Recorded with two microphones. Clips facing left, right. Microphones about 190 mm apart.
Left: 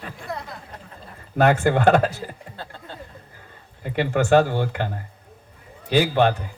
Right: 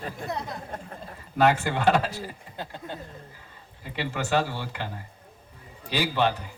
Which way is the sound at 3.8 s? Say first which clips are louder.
Left 9 dB; 50° left (ahead or behind).